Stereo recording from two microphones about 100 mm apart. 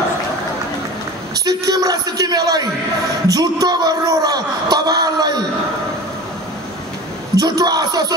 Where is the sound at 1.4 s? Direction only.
35° right (ahead or behind).